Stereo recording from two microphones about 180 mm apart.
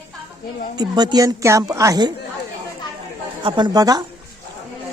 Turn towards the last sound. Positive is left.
turn(degrees=-20)  # may be behind; listen again after turning